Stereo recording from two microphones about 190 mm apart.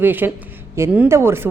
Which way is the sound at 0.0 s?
10° right (ahead or behind).